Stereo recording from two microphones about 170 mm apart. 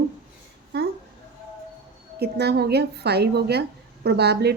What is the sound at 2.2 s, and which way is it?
A woman's voice, 75° right (ahead or behind).